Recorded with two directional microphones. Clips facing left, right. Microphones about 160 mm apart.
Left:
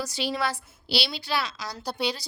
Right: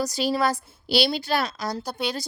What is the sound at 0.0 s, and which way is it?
A woman's voice, 40° right (ahead or behind).